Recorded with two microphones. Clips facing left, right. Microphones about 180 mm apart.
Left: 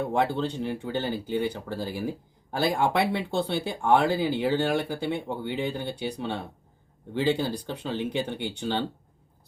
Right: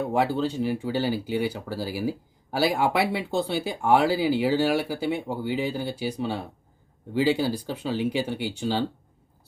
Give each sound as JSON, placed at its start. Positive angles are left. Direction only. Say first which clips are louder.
{"t": 0.1, "sound": "speech", "louder": "right 2 dB", "side_deg": -5}